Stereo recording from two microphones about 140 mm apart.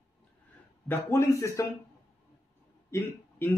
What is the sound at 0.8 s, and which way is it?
Speech, 15° left (ahead or behind).